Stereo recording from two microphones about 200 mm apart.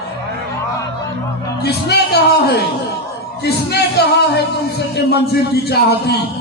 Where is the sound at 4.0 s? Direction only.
55° left (ahead or behind).